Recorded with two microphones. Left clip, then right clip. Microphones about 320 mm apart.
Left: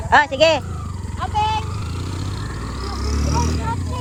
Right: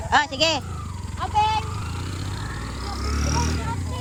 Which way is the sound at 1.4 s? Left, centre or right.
Right.